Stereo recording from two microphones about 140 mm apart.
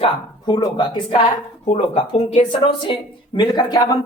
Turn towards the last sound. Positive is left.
turn(degrees=30)  # may be behind; listen again after turning